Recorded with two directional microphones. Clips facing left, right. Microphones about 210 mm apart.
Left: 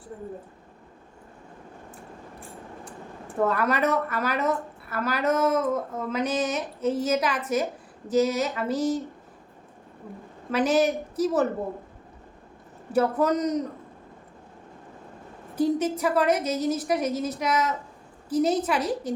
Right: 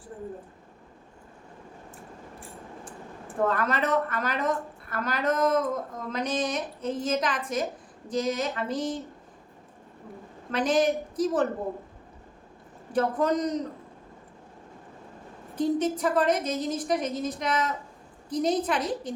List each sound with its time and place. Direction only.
3.5 s a woman's voice: 10° left (ahead or behind)
10.5 s a woman's voice: 10° left (ahead or behind)
12.9 s a woman's voice: 10° left (ahead or behind)
15.5 s a woman's voice: 10° left (ahead or behind)